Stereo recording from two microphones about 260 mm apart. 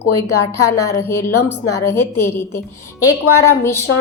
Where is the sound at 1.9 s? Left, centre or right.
Centre.